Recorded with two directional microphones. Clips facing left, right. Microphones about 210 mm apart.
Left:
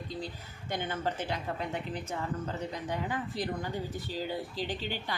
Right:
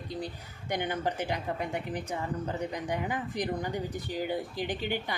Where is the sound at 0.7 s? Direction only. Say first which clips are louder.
Right 3 dB; 15° right (ahead or behind).